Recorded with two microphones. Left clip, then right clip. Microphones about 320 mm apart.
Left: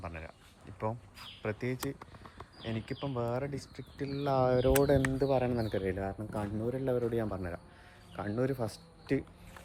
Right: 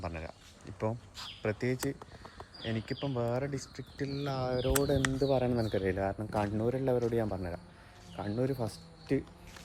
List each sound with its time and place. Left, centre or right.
0.0 s a sound: centre
1.4 s speech: centre
4.4 s speech: left
5.2 s speech: centre